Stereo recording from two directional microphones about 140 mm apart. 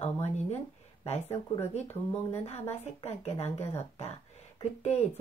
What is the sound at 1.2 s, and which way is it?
Speech, 20° left (ahead or behind).